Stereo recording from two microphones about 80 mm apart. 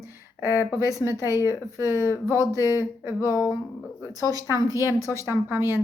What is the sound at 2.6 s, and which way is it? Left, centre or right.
Speech, left.